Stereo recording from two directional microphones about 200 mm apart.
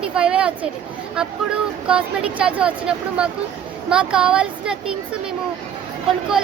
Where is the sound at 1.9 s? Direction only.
5° right (ahead or behind).